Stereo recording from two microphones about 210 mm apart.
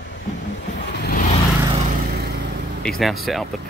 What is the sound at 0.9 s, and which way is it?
Vehicle, 45° left (ahead or behind).